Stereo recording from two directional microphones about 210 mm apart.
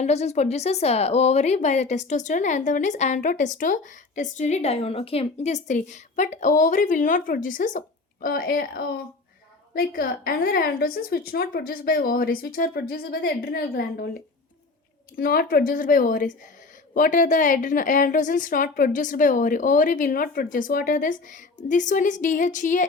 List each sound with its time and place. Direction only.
0.0 s a woman's voice: 30° left (ahead or behind)